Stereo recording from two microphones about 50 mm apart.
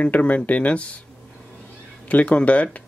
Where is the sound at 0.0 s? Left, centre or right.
Left.